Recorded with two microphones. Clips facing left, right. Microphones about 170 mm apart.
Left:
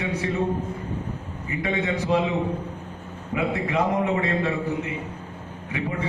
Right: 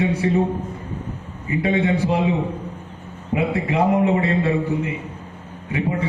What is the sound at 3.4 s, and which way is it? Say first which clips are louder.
Speech: right 4 dB; 25° right (ahead or behind).